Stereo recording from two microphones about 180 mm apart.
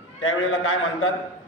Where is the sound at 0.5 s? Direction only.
90° left.